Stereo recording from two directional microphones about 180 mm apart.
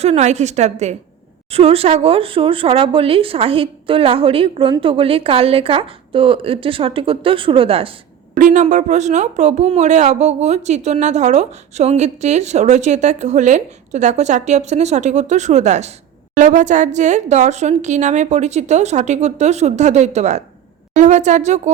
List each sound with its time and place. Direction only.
0.0 s speech: 35° right (ahead or behind)
8.4 s speech: 45° right (ahead or behind)